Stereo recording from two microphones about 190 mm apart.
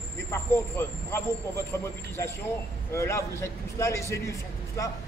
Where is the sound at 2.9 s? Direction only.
15° left (ahead or behind).